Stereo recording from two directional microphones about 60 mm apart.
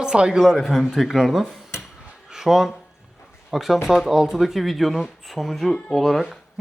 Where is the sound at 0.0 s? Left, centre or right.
Centre.